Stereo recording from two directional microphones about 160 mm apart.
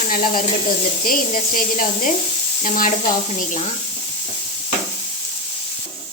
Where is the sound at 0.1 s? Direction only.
60° left (ahead or behind).